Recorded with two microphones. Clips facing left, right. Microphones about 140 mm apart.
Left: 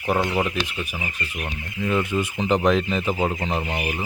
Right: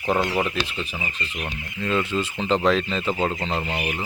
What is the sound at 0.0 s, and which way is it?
Speech, 15° left (ahead or behind).